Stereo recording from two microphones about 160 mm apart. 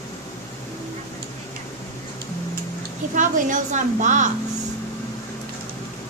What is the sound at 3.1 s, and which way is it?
A woman's voice, 50° right (ahead or behind).